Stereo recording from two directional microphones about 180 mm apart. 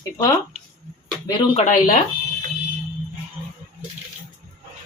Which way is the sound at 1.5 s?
45° left (ahead or behind).